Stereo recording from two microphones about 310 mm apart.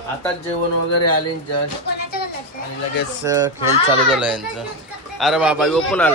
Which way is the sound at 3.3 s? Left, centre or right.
Centre.